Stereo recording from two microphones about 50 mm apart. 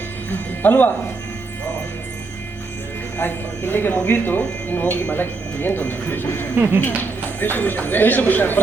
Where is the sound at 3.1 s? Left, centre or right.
Left.